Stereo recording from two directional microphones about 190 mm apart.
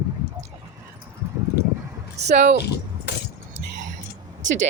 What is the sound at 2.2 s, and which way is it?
Speech, 60° right (ahead or behind).